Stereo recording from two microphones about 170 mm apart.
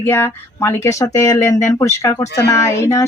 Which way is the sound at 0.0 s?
15° left (ahead or behind).